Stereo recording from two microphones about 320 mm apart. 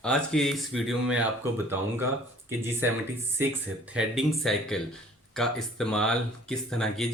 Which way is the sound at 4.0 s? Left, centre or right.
Centre.